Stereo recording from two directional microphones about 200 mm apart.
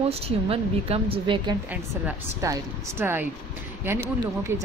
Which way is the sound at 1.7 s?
10° right (ahead or behind).